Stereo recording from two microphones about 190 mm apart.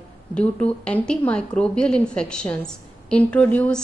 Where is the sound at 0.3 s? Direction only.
5° left (ahead or behind).